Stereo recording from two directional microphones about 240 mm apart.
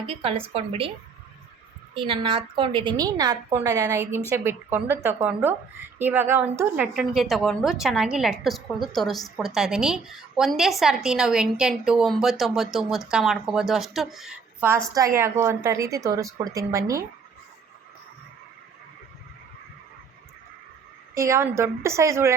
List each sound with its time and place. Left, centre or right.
0.1 s a woman's voice: right
2.0 s a woman's voice: right
21.2 s speech: centre